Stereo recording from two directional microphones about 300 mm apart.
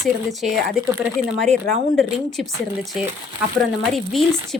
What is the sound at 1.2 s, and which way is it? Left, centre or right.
Speech, centre.